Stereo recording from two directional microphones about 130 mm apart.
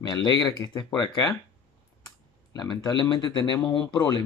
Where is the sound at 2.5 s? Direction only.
30° left (ahead or behind).